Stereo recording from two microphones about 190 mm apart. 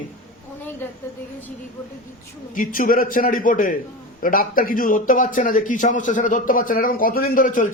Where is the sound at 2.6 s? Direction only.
45° left (ahead or behind).